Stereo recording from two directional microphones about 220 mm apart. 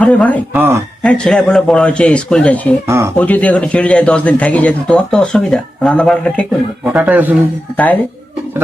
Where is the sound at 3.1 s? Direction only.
5° left (ahead or behind).